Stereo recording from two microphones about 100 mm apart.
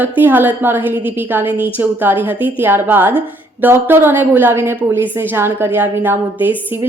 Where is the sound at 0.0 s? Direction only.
20° right (ahead or behind).